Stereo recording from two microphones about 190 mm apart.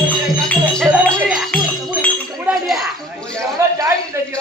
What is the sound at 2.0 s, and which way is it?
Chink, centre (ahead or behind).